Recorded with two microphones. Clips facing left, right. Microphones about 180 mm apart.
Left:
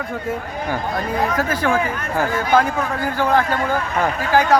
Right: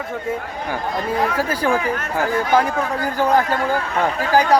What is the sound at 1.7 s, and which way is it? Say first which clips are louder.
Speech: even; 15° right (ahead or behind).